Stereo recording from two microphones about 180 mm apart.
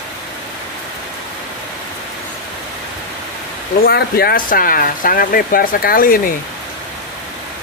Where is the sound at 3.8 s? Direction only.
60° left (ahead or behind).